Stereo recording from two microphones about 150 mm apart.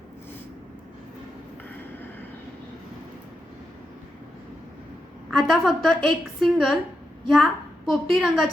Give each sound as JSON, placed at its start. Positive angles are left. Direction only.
{"t": 5.4, "sound": "a woman's voice", "side_deg": 0}